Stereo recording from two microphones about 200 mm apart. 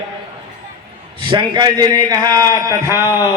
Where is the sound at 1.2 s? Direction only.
25° right (ahead or behind).